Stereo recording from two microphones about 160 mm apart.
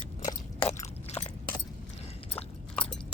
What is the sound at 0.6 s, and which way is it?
Chewing, 40° left (ahead or behind).